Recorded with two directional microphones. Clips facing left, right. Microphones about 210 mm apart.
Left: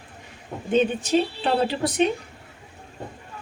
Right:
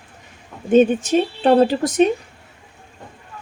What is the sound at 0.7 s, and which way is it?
Speech, 45° right (ahead or behind).